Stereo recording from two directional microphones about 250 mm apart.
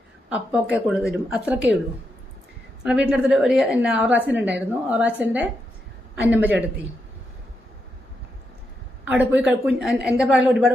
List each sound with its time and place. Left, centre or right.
0.3 s speech: centre
2.8 s speech: centre
9.0 s speech: centre